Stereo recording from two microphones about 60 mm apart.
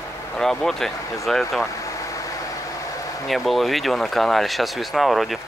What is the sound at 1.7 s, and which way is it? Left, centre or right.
Vehicle, left.